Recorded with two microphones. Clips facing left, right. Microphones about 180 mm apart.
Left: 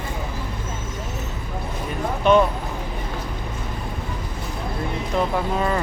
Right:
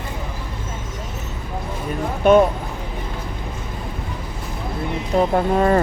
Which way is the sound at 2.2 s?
45° right (ahead or behind).